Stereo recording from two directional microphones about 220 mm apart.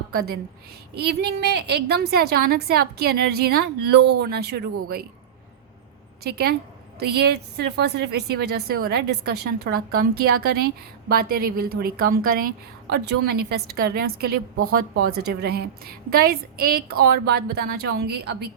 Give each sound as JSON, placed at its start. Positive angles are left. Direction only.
{"t": 0.1, "sound": "a woman's voice", "side_deg": -45}
{"t": 6.3, "sound": "a woman's voice", "side_deg": -45}